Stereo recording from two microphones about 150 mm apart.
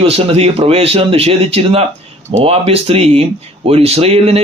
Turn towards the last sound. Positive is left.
turn(degrees=-45)  # may be behind; listen again after turning